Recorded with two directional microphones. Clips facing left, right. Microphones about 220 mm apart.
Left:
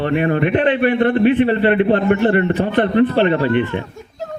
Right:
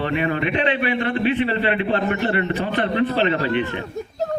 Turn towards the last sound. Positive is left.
turn(degrees=55)  # may be behind; listen again after turning